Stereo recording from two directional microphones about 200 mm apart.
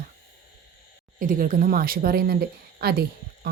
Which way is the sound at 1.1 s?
45° right (ahead or behind).